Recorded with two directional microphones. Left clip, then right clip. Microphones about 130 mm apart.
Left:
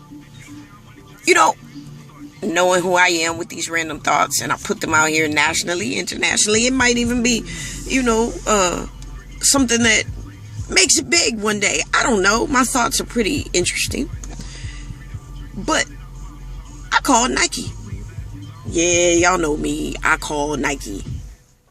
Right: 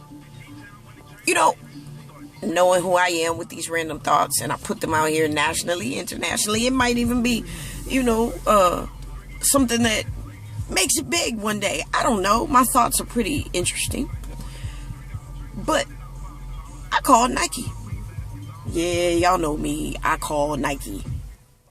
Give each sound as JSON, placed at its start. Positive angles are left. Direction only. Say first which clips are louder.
{"t": 1.3, "sound": "speech", "louder": "left 5 dB", "side_deg": -15}
{"t": 15.6, "sound": "speech", "louder": "left 3 dB", "side_deg": -20}
{"t": 16.9, "sound": "speech", "louder": "left 1 dB", "side_deg": -20}
{"t": 18.8, "sound": "speech", "louder": "left 5 dB", "side_deg": -15}